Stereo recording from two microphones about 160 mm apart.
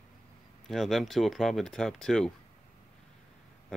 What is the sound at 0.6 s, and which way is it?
Speech, centre (ahead or behind).